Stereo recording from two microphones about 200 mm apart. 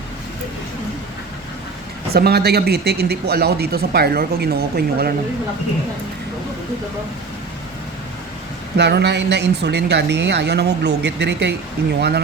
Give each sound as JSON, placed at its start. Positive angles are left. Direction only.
{"t": 2.1, "sound": "speech", "side_deg": -50}
{"t": 8.8, "sound": "speech", "side_deg": -60}